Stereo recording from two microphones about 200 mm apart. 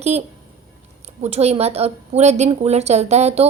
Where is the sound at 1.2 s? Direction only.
30° right (ahead or behind).